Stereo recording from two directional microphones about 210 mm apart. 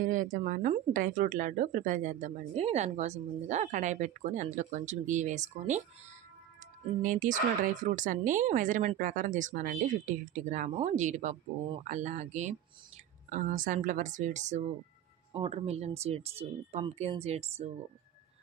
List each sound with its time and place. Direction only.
0.0 s speech: 40° right (ahead or behind)
7.0 s speech: 40° right (ahead or behind)